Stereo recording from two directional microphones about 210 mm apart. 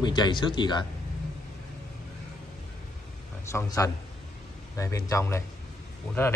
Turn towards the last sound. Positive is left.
turn(degrees=10)  # may be behind; listen again after turning